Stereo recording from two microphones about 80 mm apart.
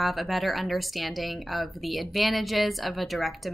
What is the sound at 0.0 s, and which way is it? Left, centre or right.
A woman's voice, centre.